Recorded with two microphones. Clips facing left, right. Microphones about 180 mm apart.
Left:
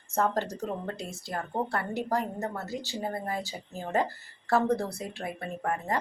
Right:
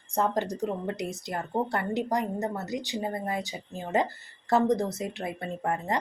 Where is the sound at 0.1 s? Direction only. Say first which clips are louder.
Right 1 dB; 15° right (ahead or behind).